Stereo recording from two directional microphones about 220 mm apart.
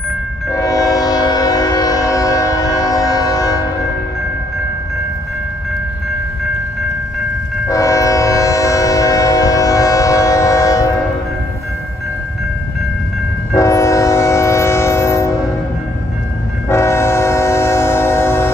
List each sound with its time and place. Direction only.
0.5 s train: 15° left (ahead or behind)
7.6 s train: 15° left (ahead or behind)
13.5 s train: 15° left (ahead or behind)
16.6 s train: 10° left (ahead or behind)